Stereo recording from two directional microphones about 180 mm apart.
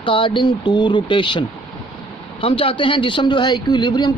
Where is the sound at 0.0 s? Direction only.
30° left (ahead or behind).